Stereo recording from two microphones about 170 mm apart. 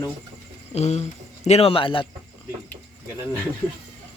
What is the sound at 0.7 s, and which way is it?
Speech, 40° left (ahead or behind).